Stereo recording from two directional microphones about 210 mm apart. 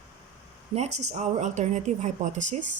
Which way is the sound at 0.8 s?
30° right (ahead or behind).